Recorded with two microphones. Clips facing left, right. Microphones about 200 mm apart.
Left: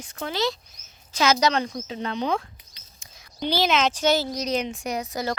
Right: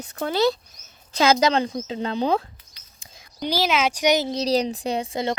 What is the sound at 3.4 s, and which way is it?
Speech, 10° right (ahead or behind).